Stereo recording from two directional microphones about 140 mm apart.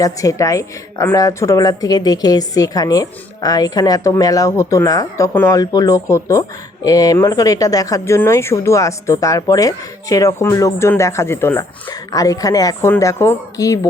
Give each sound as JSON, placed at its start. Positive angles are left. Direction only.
{"t": 0.0, "sound": "a woman's voice", "side_deg": 25}